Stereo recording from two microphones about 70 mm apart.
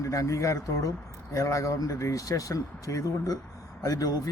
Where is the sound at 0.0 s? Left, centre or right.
Left.